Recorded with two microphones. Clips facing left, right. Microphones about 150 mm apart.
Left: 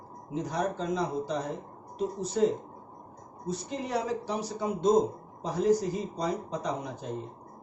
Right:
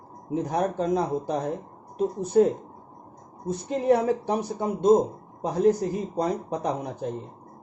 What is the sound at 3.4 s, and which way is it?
Speech, 55° right (ahead or behind).